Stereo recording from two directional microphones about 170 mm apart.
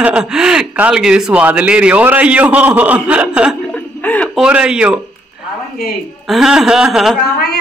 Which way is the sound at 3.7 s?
10° left (ahead or behind).